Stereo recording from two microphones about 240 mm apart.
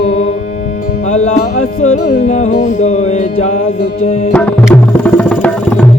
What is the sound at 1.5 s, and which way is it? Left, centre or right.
Music, left.